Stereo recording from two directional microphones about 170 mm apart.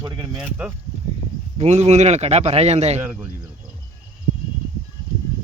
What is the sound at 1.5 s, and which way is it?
A man's voice, 40° right (ahead or behind).